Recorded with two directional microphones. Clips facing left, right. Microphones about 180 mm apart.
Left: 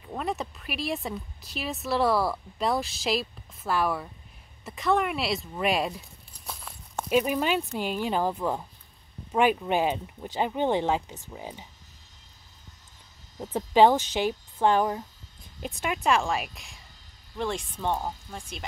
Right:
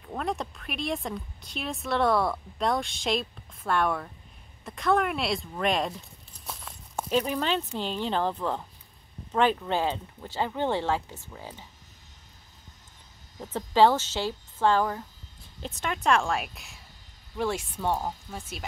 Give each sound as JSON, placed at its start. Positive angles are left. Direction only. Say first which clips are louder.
{"t": 0.0, "sound": "speech", "louder": "even", "side_deg": 5}
{"t": 4.6, "sound": "a sound", "louder": "even", "side_deg": 0}
{"t": 7.1, "sound": "speech", "louder": "left 2 dB", "side_deg": 10}
{"t": 13.4, "sound": "speech", "louder": "left 2 dB", "side_deg": 15}